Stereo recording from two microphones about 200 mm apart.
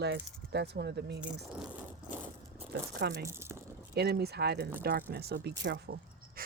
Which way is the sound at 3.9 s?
55° right (ahead or behind).